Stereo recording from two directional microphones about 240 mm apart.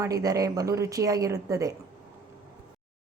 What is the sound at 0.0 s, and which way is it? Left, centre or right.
Speech, centre.